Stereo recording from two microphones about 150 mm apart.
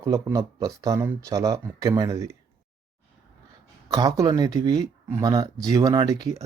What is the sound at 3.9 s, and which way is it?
Speech, 25° right (ahead or behind).